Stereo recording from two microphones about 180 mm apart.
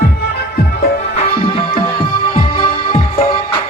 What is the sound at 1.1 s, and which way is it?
Music, 30° left (ahead or behind).